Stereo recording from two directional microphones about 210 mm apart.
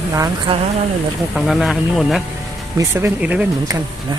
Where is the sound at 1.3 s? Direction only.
Centre (ahead or behind).